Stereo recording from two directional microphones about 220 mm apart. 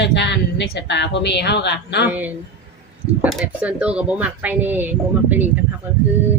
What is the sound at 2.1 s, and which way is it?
Speech, 10° right (ahead or behind).